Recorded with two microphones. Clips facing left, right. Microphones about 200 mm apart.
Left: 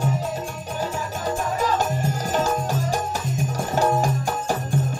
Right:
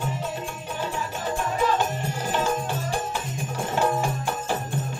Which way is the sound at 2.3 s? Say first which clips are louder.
Left 2 dB; 40° left (ahead or behind).